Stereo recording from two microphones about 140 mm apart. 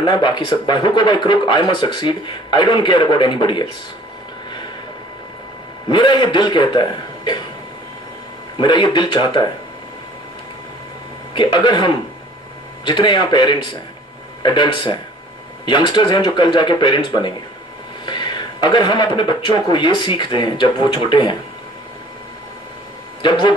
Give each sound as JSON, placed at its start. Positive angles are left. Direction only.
{"t": 0.0, "sound": "speech", "side_deg": 30}
{"t": 5.9, "sound": "speech", "side_deg": 35}
{"t": 8.5, "sound": "speech", "side_deg": 35}
{"t": 11.3, "sound": "speech", "side_deg": 30}
{"t": 23.2, "sound": "speech", "side_deg": 30}